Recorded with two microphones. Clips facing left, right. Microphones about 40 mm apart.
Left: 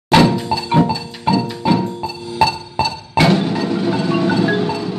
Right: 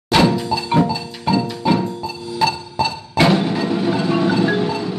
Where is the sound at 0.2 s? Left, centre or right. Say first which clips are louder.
Left 2 dB; centre.